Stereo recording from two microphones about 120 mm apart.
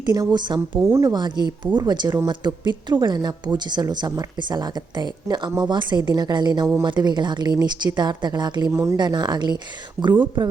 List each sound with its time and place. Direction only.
0.0 s speech: 35° right (ahead or behind)
8.7 s speech: 25° right (ahead or behind)
9.0 s speech: 35° right (ahead or behind)
10.0 s speech: 5° right (ahead or behind)